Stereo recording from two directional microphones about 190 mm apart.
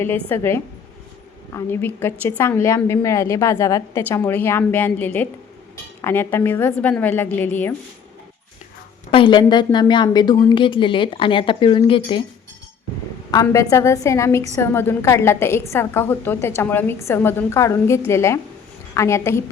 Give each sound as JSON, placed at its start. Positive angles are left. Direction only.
{"t": 0.0, "sound": "a woman's voice", "side_deg": 10}
{"t": 9.0, "sound": "a woman's voice", "side_deg": 30}
{"t": 13.3, "sound": "a woman's voice", "side_deg": 15}